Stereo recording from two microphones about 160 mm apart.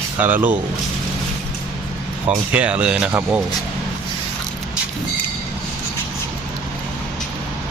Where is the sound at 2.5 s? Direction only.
10° right (ahead or behind).